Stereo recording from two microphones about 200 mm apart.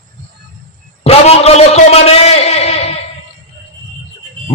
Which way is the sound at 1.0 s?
30° left (ahead or behind).